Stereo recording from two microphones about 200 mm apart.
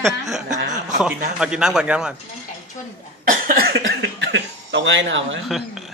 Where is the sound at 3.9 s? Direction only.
60° right (ahead or behind).